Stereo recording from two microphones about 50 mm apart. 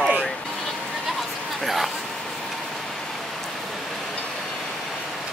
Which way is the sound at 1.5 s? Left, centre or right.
Centre.